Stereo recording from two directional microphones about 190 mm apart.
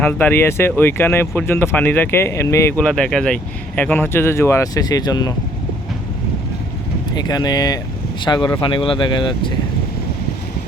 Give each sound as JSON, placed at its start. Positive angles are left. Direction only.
{"t": 0.0, "sound": "speech", "side_deg": 10}
{"t": 7.1, "sound": "speech", "side_deg": 20}